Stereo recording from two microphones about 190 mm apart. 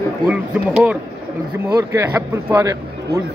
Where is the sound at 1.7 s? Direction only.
15° right (ahead or behind).